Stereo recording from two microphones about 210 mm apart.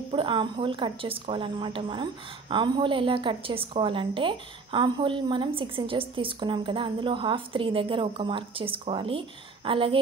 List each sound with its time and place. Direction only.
0.1 s a woman's voice: 25° right (ahead or behind)